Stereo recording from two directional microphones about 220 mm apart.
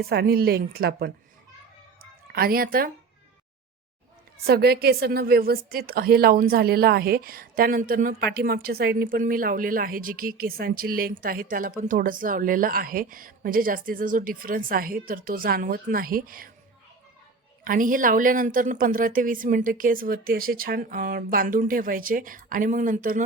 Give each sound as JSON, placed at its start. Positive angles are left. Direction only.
{"t": 0.1, "sound": "speech", "side_deg": -45}
{"t": 2.0, "sound": "music", "side_deg": -45}
{"t": 4.4, "sound": "a woman's voice", "side_deg": -45}
{"t": 17.6, "sound": "a woman's voice", "side_deg": -40}